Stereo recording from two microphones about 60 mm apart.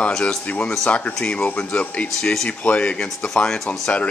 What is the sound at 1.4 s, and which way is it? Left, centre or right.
Speech, left.